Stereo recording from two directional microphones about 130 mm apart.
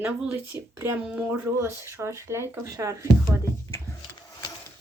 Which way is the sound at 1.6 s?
20° right (ahead or behind).